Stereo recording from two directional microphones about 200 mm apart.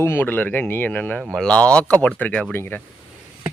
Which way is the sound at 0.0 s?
10° left (ahead or behind).